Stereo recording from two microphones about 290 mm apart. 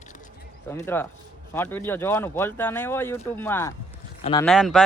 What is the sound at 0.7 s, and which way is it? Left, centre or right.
Speech, centre.